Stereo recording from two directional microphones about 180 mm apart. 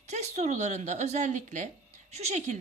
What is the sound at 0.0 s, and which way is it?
Speech, 40° right (ahead or behind).